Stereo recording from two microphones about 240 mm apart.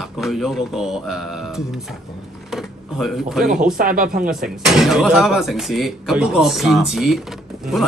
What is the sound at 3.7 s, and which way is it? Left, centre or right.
Speech, right.